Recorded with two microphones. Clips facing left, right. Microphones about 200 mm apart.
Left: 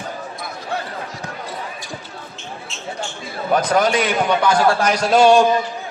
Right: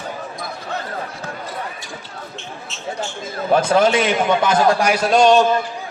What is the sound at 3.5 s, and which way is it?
A man's voice, 25° right (ahead or behind).